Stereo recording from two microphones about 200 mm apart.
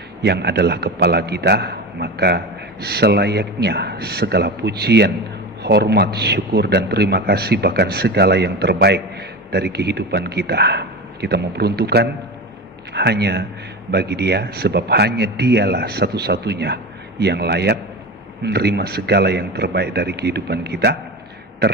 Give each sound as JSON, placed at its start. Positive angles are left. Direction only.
{"t": 0.2, "sound": "speech", "side_deg": -55}